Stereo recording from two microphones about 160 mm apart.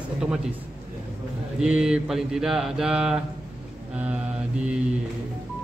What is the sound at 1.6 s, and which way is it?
Mantra, 5° right (ahead or behind).